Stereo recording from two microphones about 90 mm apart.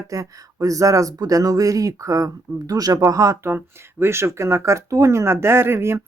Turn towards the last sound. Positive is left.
turn(degrees=-30)  # may be behind; listen again after turning